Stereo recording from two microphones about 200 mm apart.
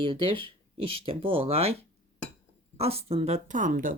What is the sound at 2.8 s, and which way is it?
Speech, 30° right (ahead or behind).